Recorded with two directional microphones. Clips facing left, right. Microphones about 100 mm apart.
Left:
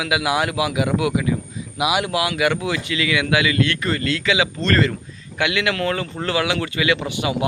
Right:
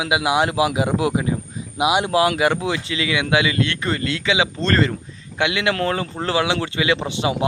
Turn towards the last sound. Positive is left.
turn(degrees=-30)  # may be behind; listen again after turning